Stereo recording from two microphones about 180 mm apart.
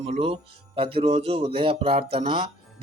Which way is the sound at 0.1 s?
30° right (ahead or behind).